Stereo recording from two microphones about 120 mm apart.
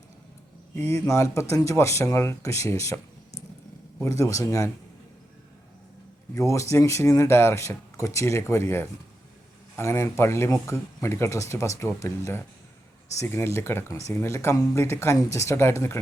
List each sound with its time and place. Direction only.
0.8 s speech: 25° left (ahead or behind)
6.3 s speech: 25° left (ahead or behind)